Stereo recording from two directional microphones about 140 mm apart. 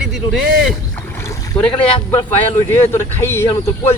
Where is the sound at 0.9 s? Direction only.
20° left (ahead or behind).